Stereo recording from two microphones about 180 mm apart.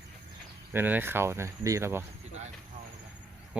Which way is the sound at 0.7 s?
10° right (ahead or behind).